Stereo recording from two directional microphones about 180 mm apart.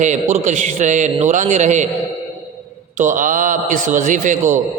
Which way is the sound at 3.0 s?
45° right (ahead or behind).